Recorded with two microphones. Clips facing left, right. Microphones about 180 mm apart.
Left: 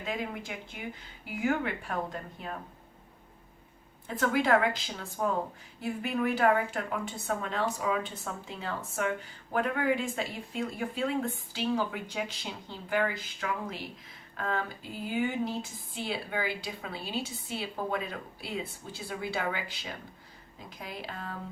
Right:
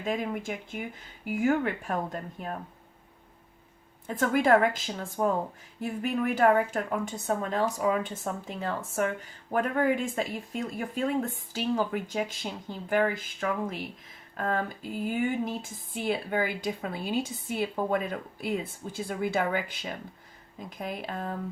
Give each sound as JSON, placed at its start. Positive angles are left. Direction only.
{"t": 0.0, "sound": "a woman's voice", "side_deg": -50}
{"t": 4.0, "sound": "a woman's voice", "side_deg": -50}